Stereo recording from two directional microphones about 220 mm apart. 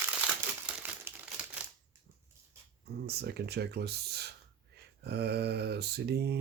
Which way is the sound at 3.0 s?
50° right (ahead or behind).